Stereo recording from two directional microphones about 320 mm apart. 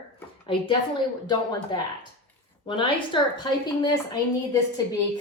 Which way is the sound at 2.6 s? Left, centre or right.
Centre.